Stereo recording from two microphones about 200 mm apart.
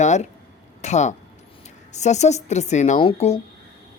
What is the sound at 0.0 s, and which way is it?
Speech, 35° left (ahead or behind).